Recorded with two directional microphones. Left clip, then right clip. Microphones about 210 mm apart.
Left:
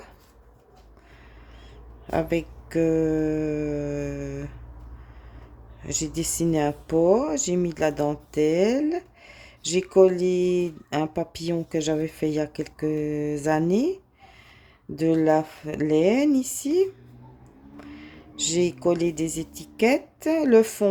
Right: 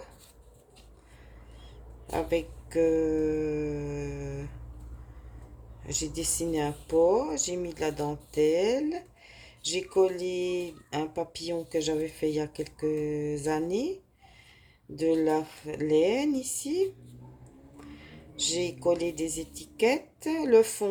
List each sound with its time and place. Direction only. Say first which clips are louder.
2.0 s speech: left 4 dB; 50° left (ahead or behind)
5.8 s speech: left 4 dB; 50° left (ahead or behind)